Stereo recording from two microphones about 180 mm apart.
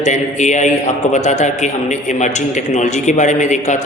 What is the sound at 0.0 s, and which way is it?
A woman's voice, 40° left (ahead or behind).